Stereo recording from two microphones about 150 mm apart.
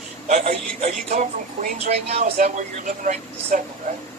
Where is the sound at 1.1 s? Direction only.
50° right (ahead or behind).